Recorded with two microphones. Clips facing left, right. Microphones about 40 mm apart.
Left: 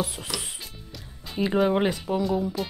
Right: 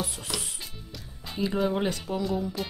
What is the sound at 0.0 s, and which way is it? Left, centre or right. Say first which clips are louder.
Music: left 3 dB; centre.